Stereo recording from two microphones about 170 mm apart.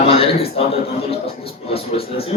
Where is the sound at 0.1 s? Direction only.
35° left (ahead or behind).